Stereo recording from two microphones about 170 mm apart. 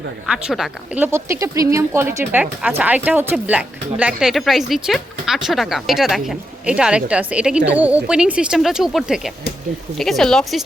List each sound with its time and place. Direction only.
0.3 s speech: centre (ahead or behind)